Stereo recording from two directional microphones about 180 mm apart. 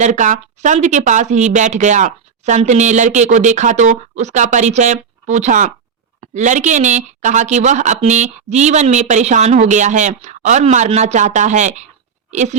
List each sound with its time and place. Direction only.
0.0 s a woman's voice: 45° right (ahead or behind)